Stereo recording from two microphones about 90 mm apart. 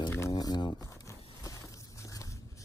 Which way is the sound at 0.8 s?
35° left (ahead or behind).